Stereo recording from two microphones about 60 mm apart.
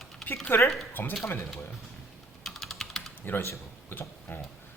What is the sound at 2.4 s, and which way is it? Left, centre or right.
Typing, centre.